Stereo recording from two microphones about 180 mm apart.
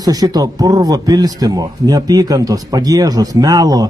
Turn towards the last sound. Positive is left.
turn(degrees=-20)  # may be behind; listen again after turning